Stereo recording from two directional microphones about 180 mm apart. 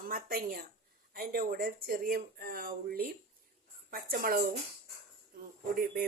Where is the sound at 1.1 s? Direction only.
55° right (ahead or behind).